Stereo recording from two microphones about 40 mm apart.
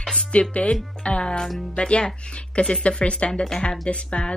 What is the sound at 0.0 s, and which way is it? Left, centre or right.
Music, centre.